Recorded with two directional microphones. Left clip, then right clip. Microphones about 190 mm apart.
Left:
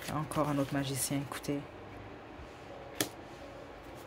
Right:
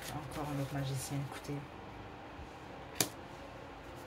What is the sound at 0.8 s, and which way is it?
Speech, 45° left (ahead or behind).